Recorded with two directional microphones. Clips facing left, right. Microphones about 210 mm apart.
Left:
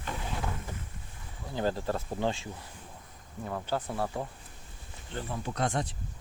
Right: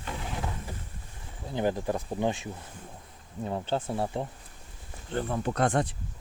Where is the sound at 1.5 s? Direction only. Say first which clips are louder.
Right 2 dB; 20° right (ahead or behind).